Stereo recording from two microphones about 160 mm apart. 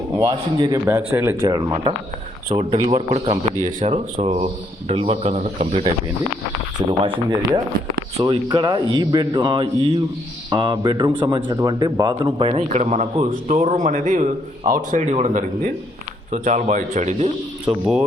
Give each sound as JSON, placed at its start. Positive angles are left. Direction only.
{"t": 0.3, "sound": "a man's voice", "side_deg": -25}
{"t": 0.9, "sound": "speech", "side_deg": -15}
{"t": 2.6, "sound": "a man's voice", "side_deg": -35}
{"t": 7.0, "sound": "a man's voice", "side_deg": -30}
{"t": 17.7, "sound": "speech", "side_deg": -5}